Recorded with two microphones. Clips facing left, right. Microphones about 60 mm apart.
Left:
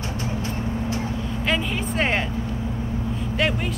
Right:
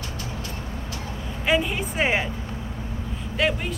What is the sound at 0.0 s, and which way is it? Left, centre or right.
Vehicle, left.